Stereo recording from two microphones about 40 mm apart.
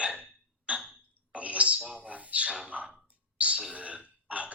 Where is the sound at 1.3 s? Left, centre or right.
Right.